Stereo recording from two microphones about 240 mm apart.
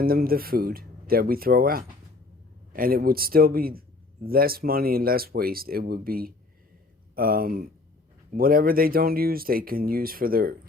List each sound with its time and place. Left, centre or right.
0.0 s speech: right